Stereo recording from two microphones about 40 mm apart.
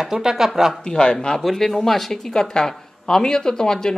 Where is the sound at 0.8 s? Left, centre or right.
Left.